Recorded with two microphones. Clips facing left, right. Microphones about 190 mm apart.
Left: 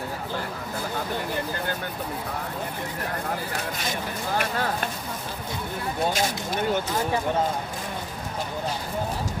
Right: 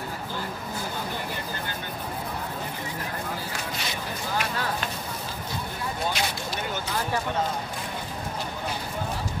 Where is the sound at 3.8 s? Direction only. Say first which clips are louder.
Left 3 dB; 50° left (ahead or behind).